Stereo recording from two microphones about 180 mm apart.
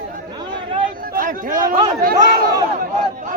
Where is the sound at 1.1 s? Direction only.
50° right (ahead or behind).